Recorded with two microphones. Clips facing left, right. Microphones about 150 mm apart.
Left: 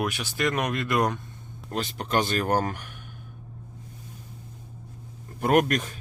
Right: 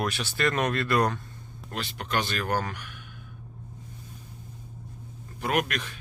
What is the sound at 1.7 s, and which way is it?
A man's voice, 40° left (ahead or behind).